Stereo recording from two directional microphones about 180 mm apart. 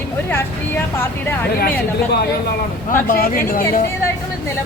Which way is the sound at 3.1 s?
50° left (ahead or behind).